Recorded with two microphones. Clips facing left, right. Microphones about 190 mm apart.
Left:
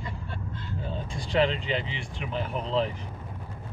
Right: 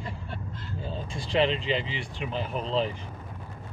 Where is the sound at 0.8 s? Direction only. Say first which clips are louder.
Right 1 dB; 30° right (ahead or behind).